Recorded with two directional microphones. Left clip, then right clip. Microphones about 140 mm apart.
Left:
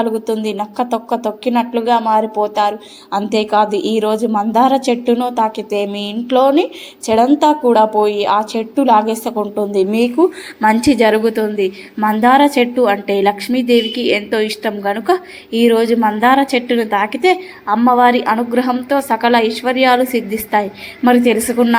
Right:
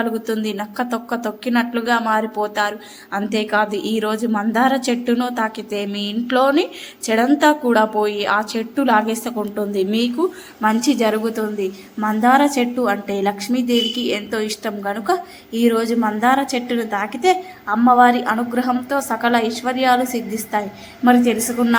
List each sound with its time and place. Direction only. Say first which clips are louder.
0.0 s a woman's voice: left 5 dB; 10° left (ahead or behind)
5.1 s a woman's voice: left 4 dB; 5° left (ahead or behind)
5.4 s a woman's voice: left 6 dB; 15° left (ahead or behind)
10.2 s a woman's voice: left 7 dB; 20° left (ahead or behind)